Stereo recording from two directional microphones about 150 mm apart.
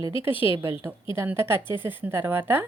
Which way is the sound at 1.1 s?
15° right (ahead or behind).